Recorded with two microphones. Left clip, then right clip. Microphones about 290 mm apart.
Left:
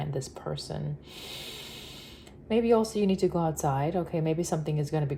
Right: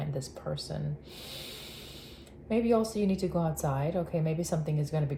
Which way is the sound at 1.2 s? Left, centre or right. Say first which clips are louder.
Left 3 dB; centre.